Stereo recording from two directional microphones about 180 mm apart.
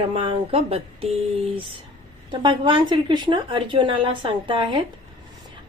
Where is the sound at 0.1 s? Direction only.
30° right (ahead or behind).